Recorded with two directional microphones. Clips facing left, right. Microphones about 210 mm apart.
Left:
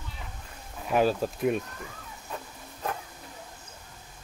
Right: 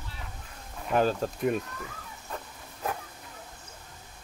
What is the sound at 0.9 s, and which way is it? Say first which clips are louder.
Speech: left 1 dB; 5° left (ahead or behind).